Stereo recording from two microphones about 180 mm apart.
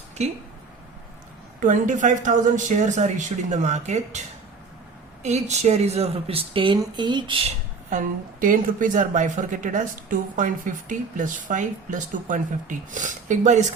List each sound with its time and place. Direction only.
0.2 s speech: 40° right (ahead or behind)
1.6 s speech: 45° right (ahead or behind)
5.2 s speech: 40° right (ahead or behind)
7.9 s a woman's voice: 45° right (ahead or behind)